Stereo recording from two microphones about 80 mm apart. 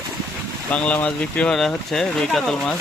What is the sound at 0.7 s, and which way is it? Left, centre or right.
Speech, centre.